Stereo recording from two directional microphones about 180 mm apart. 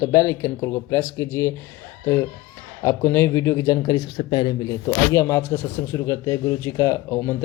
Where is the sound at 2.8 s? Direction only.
15° left (ahead or behind).